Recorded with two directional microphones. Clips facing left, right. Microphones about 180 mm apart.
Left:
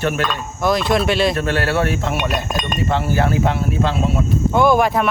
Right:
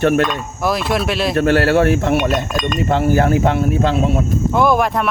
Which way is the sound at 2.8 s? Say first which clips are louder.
Right 4 dB; 50° right (ahead or behind).